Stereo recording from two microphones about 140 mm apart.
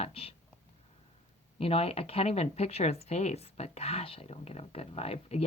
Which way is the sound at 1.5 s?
45° left (ahead or behind).